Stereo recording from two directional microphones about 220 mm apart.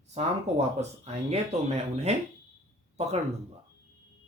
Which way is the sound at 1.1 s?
30° right (ahead or behind).